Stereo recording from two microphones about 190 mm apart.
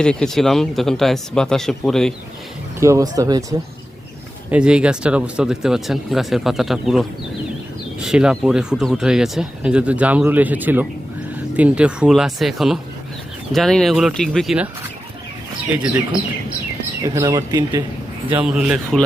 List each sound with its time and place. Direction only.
0.0 s speech: 5° left (ahead or behind)
2.8 s speech: 15° right (ahead or behind)
4.5 s speech: 5° right (ahead or behind)
17.0 s speech: 20° right (ahead or behind)
18.3 s speech: 5° right (ahead or behind)